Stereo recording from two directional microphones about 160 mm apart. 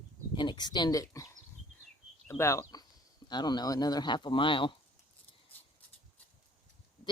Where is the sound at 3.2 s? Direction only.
25° left (ahead or behind).